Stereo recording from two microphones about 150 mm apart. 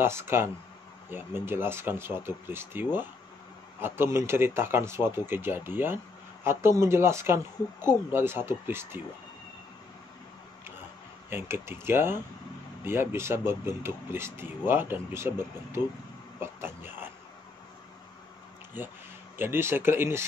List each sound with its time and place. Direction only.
0.0 s speech: 15° right (ahead or behind)
11.2 s speech: 15° right (ahead or behind)
16.3 s a sound: 15° right (ahead or behind)
19.3 s speech: 15° right (ahead or behind)